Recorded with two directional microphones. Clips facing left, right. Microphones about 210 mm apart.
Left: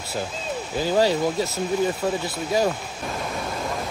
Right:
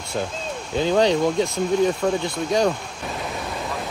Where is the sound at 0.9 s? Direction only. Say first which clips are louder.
Right 2 dB; 5° left (ahead or behind).